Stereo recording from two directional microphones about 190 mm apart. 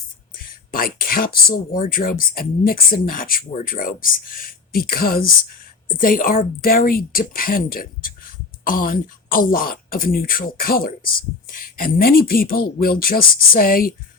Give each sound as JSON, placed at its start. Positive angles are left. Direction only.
{"t": 0.3, "sound": "speech", "side_deg": 50}